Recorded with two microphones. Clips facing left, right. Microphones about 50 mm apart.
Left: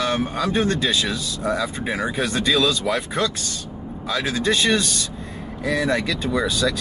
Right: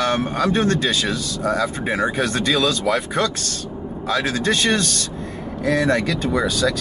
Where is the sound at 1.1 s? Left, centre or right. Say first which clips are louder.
Right 2 dB; centre.